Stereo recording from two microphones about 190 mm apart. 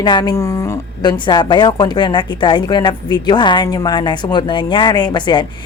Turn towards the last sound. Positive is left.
turn(degrees=25)  # may be behind; listen again after turning